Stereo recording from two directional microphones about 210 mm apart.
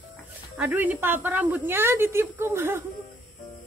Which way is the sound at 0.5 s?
5° right (ahead or behind).